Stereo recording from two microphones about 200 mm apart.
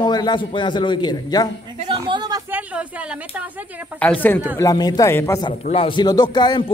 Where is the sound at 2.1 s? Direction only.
20° right (ahead or behind).